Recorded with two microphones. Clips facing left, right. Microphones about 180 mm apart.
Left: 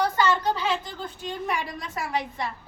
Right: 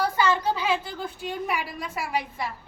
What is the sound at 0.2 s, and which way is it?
A woman's voice, 10° right (ahead or behind).